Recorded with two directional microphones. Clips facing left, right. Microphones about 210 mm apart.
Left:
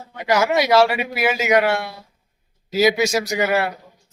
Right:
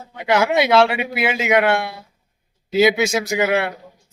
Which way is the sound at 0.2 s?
25° right (ahead or behind).